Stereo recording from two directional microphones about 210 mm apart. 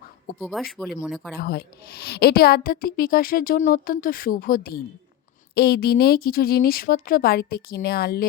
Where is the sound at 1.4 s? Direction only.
45° left (ahead or behind).